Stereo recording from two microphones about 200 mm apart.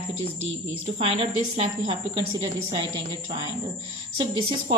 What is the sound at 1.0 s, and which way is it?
Speech, 30° right (ahead or behind).